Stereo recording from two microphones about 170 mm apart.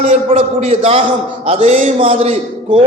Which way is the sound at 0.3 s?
40° right (ahead or behind).